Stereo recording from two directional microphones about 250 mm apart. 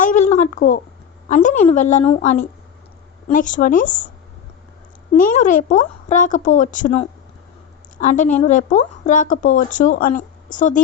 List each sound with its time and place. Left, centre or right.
0.0 s a sound: left
1.3 s a woman's voice: left
5.1 s speech: left